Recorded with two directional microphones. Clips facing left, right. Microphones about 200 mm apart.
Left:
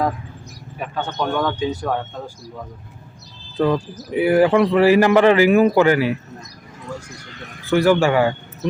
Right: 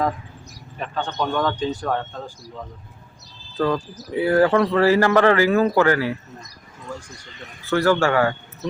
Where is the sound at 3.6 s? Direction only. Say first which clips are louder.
Left 3 dB; 15° left (ahead or behind).